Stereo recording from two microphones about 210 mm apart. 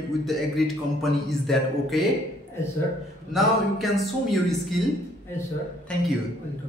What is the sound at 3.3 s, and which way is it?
A man's voice, centre (ahead or behind).